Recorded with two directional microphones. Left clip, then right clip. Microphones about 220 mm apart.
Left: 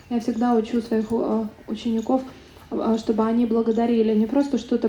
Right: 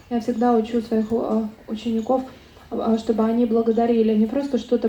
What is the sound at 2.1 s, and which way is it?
Speech, 50° left (ahead or behind).